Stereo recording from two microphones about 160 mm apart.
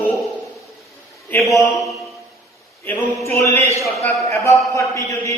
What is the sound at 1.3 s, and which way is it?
Speech, 20° left (ahead or behind).